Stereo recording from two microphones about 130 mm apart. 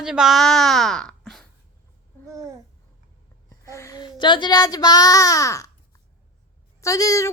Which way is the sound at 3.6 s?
25° left (ahead or behind).